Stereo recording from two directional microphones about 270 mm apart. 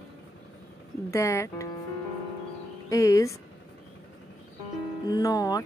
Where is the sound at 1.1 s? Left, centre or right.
Centre.